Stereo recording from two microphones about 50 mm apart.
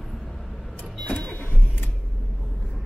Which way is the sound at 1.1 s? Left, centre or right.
Left.